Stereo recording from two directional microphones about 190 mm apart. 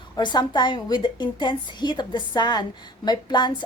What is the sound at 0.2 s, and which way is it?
A woman's voice, 25° left (ahead or behind).